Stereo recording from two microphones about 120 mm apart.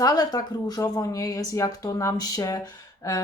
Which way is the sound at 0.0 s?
30° left (ahead or behind).